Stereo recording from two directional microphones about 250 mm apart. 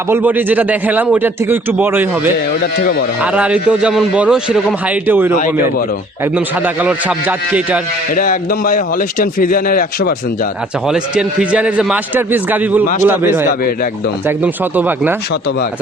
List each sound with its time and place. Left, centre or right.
0.1 s speech: centre
2.5 s a man's voice: left
3.3 s a man's voice: centre
6.8 s a man's voice: centre
8.1 s a man's voice: left
10.8 s a man's voice: centre